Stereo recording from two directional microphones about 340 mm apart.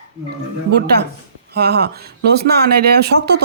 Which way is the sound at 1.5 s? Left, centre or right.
Right.